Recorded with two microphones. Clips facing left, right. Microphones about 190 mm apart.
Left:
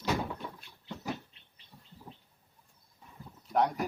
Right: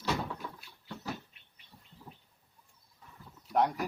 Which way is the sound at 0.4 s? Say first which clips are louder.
Left 2 dB; 20° left (ahead or behind).